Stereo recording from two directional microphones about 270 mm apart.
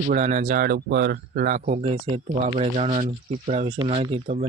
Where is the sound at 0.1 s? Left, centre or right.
Right.